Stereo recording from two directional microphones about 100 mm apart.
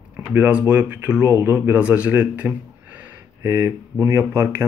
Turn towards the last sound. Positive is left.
turn(degrees=-25)  # may be behind; listen again after turning